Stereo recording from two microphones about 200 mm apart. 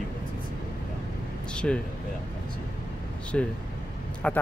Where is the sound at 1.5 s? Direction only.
5° left (ahead or behind).